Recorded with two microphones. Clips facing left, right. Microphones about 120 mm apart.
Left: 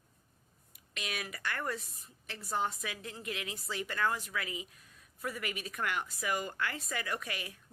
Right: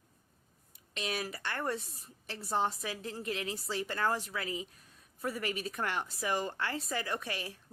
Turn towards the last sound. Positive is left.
turn(degrees=-30)  # may be behind; listen again after turning